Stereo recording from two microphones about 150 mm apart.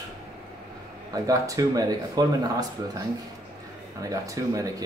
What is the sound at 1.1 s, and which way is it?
Speech, 25° right (ahead or behind).